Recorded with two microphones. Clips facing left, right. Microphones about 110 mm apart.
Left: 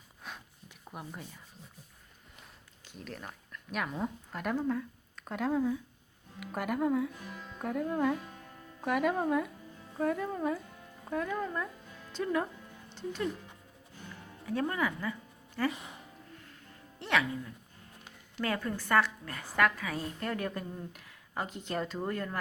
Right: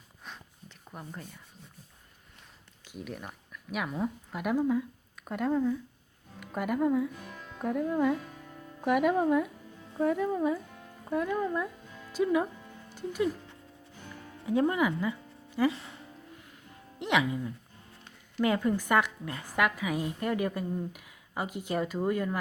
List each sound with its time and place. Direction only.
0.2 s a sound: 5° left (ahead or behind)
0.9 s speech: 5° left (ahead or behind)
2.8 s a woman's voice: 10° right (ahead or behind)
14.4 s a woman's voice: 20° right (ahead or behind)
15.7 s speech: 15° left (ahead or behind)
17.0 s music: 15° right (ahead or behind)
18.3 s a woman's voice: 15° right (ahead or behind)